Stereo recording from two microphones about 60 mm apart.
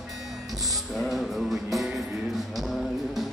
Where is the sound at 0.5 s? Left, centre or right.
Right.